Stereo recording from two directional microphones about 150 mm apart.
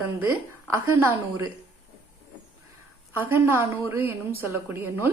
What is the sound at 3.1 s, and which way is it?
Speech, 15° right (ahead or behind).